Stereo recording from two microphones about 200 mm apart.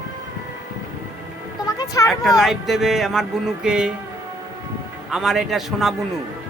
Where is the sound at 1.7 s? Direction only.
20° left (ahead or behind).